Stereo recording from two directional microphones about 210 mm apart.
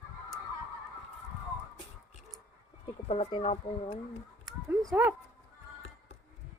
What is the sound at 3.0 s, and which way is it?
Speech, 30° left (ahead or behind).